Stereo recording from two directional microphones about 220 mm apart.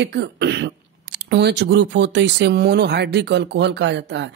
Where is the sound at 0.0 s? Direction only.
50° right (ahead or behind).